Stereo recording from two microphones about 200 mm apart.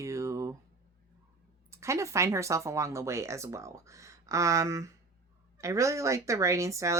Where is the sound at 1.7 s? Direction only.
15° right (ahead or behind).